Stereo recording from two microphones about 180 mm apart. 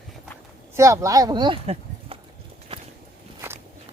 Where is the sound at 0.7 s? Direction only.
15° right (ahead or behind).